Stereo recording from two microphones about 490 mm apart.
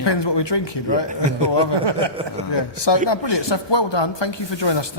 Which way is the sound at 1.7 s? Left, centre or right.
Right.